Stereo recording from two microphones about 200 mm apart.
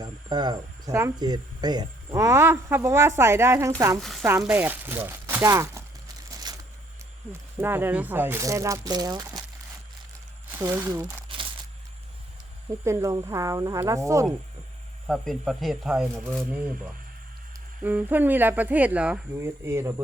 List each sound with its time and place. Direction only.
0.0 s speech: 20° right (ahead or behind)
6.5 s a sound: 20° right (ahead or behind)
7.6 s speech: 10° right (ahead or behind)
10.6 s speech: 15° right (ahead or behind)
12.8 s speech: 15° right (ahead or behind)
15.0 s speech: centre (ahead or behind)
17.8 s speech: 10° right (ahead or behind)